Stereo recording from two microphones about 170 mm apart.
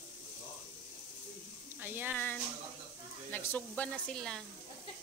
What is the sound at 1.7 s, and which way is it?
Speech, 10° right (ahead or behind).